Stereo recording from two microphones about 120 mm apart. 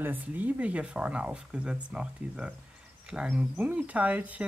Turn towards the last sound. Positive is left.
turn(degrees=-10)  # may be behind; listen again after turning